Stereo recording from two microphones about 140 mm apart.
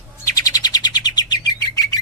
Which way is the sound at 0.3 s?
25° left (ahead or behind).